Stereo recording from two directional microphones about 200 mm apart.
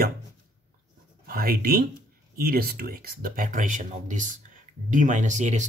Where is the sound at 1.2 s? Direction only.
50° right (ahead or behind).